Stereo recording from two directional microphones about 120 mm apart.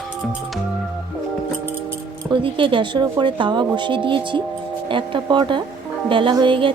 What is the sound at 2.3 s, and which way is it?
Speech, 45° right (ahead or behind).